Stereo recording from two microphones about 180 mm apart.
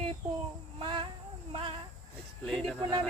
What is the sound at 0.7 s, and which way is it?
Speech, 30° right (ahead or behind).